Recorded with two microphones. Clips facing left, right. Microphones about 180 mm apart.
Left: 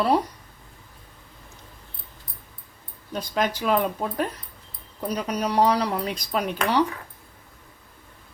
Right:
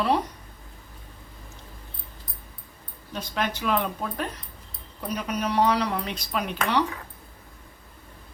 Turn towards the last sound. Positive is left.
turn(degrees=35)  # may be behind; listen again after turning